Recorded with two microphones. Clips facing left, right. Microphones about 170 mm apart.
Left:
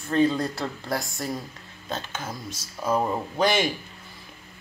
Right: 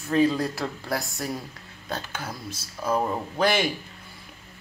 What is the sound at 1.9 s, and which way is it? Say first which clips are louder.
Speech: left 1 dB; 15° left (ahead or behind).